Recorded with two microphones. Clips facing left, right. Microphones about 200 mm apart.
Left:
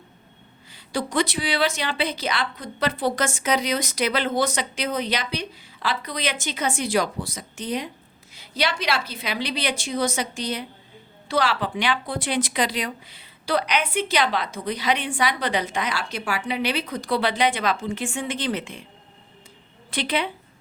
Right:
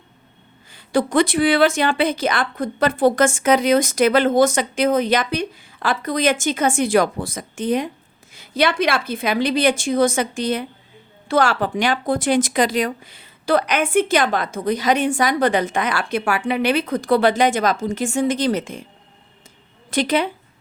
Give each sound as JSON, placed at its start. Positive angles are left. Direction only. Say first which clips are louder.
{"t": 0.7, "sound": "speech", "louder": "right 8 dB", "side_deg": -55}
{"t": 19.9, "sound": "speech", "louder": "right 6 dB", "side_deg": -45}